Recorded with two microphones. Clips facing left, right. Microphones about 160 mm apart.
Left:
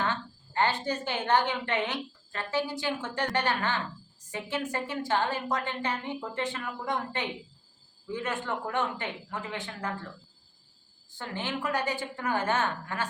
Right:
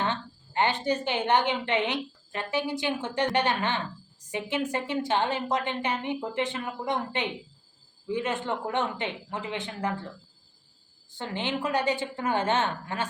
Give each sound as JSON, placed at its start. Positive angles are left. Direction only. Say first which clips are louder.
{"t": 0.0, "sound": "a woman's voice", "louder": "right 1 dB", "side_deg": -20}
{"t": 11.2, "sound": "a woman's voice", "louder": "right 3 dB", "side_deg": -20}